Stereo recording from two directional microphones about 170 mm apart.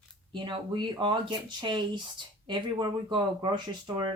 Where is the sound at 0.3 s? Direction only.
25° right (ahead or behind).